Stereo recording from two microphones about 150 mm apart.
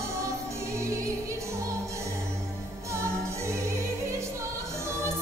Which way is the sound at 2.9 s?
20° right (ahead or behind).